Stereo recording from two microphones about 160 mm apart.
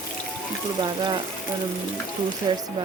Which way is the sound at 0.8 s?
30° right (ahead or behind).